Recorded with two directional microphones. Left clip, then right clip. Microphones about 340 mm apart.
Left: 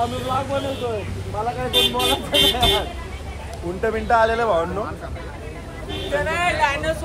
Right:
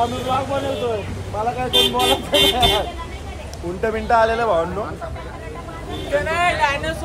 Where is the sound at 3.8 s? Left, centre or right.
Centre.